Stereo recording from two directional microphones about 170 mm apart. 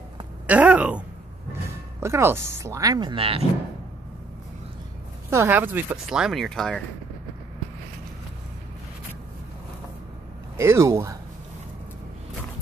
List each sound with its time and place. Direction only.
0.5 s speech: 5° right (ahead or behind); by 3.4 s 35° right (ahead or behind)
5.3 s speech: 15° right (ahead or behind); by 6.8 s 5° left (ahead or behind)
10.6 s speech: 15° right (ahead or behind)